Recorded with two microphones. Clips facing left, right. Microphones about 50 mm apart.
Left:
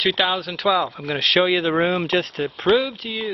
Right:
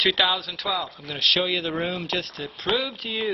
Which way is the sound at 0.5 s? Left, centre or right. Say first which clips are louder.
Left 8 dB; left.